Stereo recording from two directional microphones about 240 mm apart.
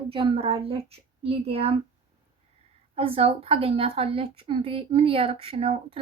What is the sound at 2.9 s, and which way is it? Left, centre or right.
A woman's voice, right.